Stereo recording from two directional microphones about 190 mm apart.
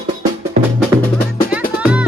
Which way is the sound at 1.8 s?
5° right (ahead or behind).